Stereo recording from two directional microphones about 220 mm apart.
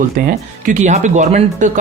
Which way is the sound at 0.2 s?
35° right (ahead or behind).